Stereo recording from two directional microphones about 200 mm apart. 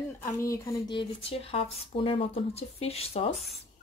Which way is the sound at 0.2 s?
15° left (ahead or behind).